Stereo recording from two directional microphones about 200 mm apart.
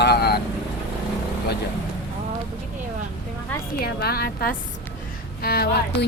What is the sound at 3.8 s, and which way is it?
A woman's voice, 50° left (ahead or behind).